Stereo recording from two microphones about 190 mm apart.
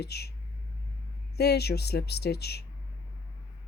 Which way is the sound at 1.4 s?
60° left (ahead or behind).